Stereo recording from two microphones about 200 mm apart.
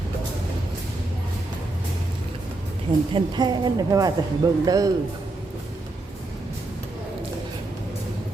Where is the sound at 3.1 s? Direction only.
20° right (ahead or behind).